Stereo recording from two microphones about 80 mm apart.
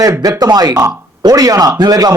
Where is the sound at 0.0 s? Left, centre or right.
Right.